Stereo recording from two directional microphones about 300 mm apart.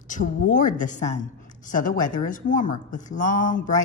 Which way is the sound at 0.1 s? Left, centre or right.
Left.